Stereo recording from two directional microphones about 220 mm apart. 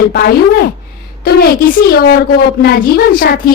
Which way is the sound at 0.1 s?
45° left (ahead or behind).